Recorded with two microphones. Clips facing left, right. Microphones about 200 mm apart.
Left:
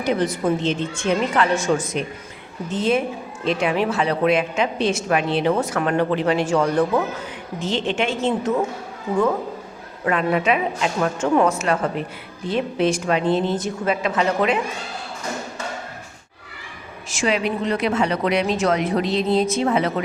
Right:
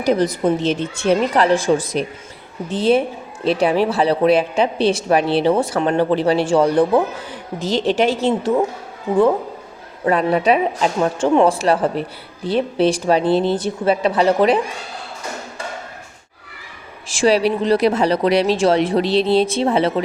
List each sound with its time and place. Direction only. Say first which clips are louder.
0.0 s a woman's voice: right 4 dB; 40° right (ahead or behind)
10.1 s a woman's voice: right 4 dB; 35° right (ahead or behind)
17.1 s a woman's voice: right 6 dB; 35° right (ahead or behind)